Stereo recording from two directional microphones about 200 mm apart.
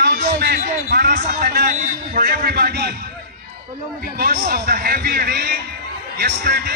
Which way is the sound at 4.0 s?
50° right (ahead or behind).